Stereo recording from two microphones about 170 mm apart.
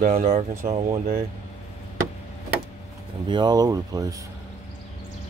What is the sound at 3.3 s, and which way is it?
Speech, 25° right (ahead or behind).